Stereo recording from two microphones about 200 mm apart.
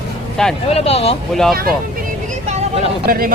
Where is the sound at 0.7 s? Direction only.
30° left (ahead or behind).